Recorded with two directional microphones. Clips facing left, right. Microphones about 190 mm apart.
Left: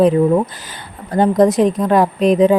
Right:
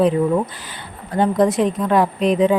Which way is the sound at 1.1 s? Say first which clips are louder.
Left 4 dB; 40° left (ahead or behind).